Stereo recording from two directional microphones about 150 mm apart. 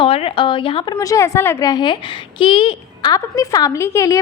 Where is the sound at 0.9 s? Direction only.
20° left (ahead or behind).